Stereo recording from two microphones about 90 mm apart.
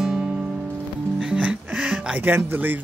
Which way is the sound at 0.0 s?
5° right (ahead or behind).